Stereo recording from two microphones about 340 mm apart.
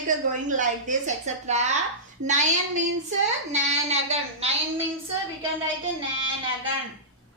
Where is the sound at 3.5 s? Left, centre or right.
Centre.